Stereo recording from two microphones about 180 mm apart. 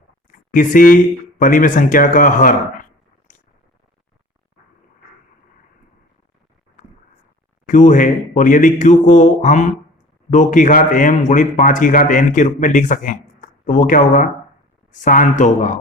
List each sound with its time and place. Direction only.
0.3 s speech: 45° left (ahead or behind)
7.7 s speech: 45° left (ahead or behind)